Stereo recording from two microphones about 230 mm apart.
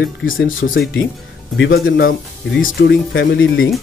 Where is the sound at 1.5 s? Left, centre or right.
Left.